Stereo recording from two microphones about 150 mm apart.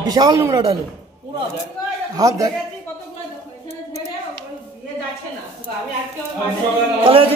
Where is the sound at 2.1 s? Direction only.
25° right (ahead or behind).